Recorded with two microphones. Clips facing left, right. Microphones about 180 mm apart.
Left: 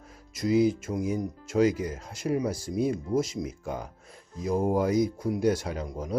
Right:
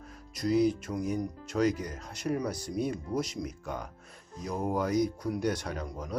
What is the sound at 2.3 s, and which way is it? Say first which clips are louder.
Speech: left 4 dB; 20° left (ahead or behind).